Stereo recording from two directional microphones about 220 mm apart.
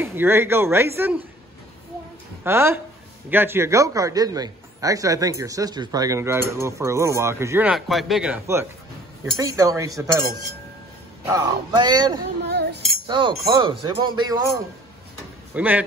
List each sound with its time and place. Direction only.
0.0 s a man's voice: 10° right (ahead or behind)
2.4 s a man's voice: 10° right (ahead or behind)
11.2 s speech: 15° right (ahead or behind)
12.4 s music: 50° right (ahead or behind)
13.0 s speech: 20° right (ahead or behind)
15.5 s speech: 10° right (ahead or behind)